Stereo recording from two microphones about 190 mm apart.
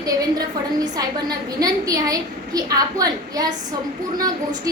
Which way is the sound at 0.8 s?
20° right (ahead or behind).